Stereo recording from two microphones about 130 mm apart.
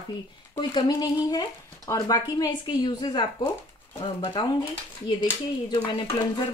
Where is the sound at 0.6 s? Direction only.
35° left (ahead or behind).